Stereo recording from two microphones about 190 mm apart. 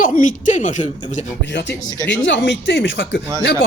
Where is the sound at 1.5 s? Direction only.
65° left (ahead or behind).